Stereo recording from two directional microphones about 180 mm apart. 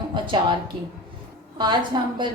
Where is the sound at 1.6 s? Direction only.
25° right (ahead or behind).